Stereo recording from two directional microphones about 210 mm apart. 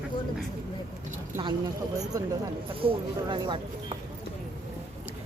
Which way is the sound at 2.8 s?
25° right (ahead or behind).